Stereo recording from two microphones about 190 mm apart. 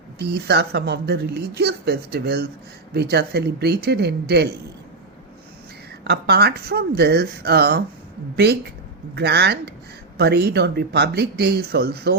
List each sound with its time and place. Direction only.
0.2 s speech: 60° right (ahead or behind)
6.1 s speech: 60° right (ahead or behind)
9.1 s speech: 60° right (ahead or behind)